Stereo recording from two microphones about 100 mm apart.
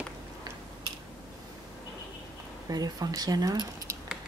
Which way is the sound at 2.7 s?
40° right (ahead or behind).